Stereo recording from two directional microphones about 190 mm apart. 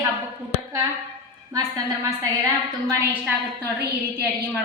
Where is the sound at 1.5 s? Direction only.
20° right (ahead or behind).